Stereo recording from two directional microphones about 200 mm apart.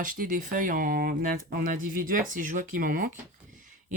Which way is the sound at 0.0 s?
45° right (ahead or behind).